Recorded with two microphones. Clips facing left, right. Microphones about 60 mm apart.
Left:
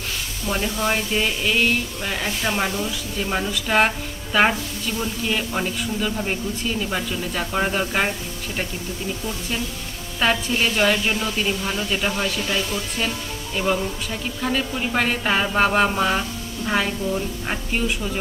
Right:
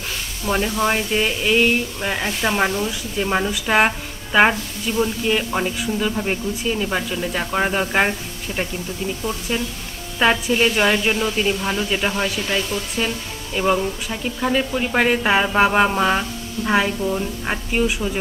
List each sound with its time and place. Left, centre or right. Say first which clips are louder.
0.5 s speech: right 3 dB; centre
10.2 s speech: right 4 dB; centre
12.5 s speech: right 2 dB; centre
13.6 s speech: right 3 dB; centre